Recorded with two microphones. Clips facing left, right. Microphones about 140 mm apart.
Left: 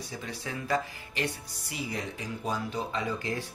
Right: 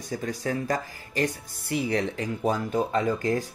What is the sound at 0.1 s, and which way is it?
Speech, 45° right (ahead or behind).